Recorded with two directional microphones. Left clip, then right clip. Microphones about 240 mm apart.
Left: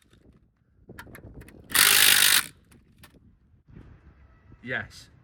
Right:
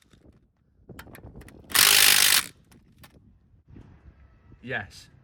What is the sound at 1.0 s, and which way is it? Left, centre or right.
Mechanisms, centre.